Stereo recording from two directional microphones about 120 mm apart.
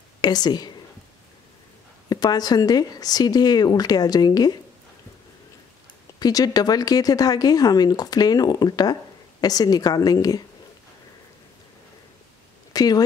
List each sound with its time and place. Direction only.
0.2 s speech: 35° left (ahead or behind)
2.0 s speech: 35° left (ahead or behind)
6.1 s speech: 30° left (ahead or behind)
12.7 s speech: 30° left (ahead or behind)